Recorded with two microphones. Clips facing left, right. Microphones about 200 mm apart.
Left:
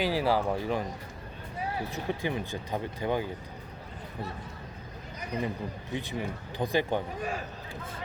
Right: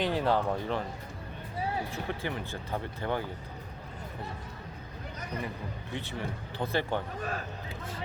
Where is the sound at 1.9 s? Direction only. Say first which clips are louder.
Left 3 dB; 15° left (ahead or behind).